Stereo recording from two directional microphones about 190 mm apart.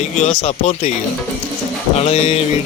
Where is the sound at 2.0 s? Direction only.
35° left (ahead or behind).